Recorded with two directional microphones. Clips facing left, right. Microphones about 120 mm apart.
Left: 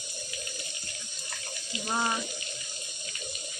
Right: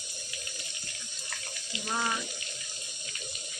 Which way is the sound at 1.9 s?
25° left (ahead or behind).